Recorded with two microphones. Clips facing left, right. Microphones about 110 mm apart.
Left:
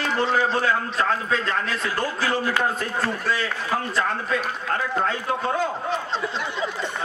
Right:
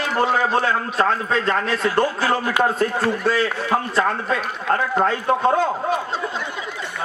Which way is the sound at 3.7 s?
30° right (ahead or behind).